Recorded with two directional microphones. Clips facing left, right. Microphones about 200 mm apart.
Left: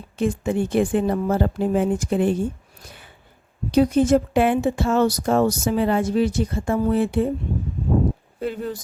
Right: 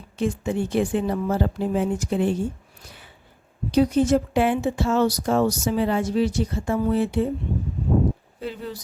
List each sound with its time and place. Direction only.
0.2 s speech: 50° left (ahead or behind)
3.7 s speech: 50° left (ahead or behind)
8.4 s speech: 50° left (ahead or behind)